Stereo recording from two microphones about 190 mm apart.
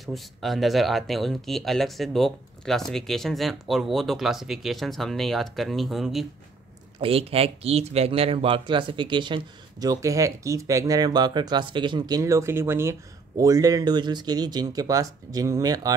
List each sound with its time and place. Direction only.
0.0 s speech: centre (ahead or behind)
7.0 s speech: 30° right (ahead or behind)